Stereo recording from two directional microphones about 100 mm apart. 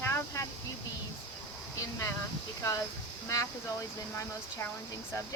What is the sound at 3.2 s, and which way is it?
Speech, 30° left (ahead or behind).